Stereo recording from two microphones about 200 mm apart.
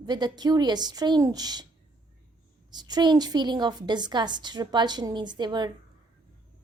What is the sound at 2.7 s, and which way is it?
A woman's voice, 20° right (ahead or behind).